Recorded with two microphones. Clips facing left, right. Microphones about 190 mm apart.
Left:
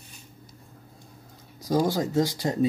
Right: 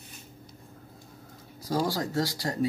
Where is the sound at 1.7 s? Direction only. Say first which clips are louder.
Left 4 dB; 20° left (ahead or behind).